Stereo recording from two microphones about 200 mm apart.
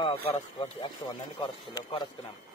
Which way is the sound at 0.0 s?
25° left (ahead or behind).